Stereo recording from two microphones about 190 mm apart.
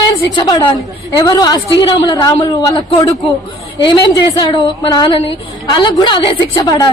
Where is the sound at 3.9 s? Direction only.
25° left (ahead or behind).